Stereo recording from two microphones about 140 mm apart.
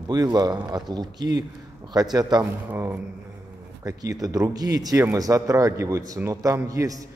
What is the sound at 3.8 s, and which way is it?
Speech, 25° right (ahead or behind).